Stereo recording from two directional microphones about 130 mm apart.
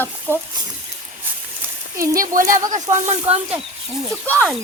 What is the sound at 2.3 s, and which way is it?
Speech, 90° right.